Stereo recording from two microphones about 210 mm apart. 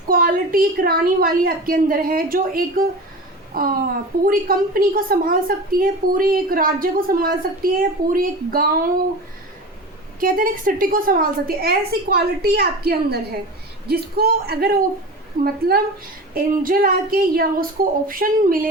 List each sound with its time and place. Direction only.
0.1 s a woman's voice: 45° right (ahead or behind)
10.2 s a woman's voice: 40° right (ahead or behind)
16.3 s a woman's voice: 45° right (ahead or behind)